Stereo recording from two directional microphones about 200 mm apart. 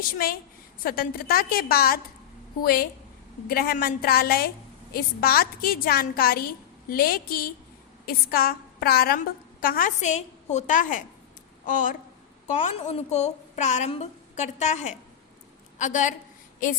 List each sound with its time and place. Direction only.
0.0 s a woman's voice: 45° left (ahead or behind)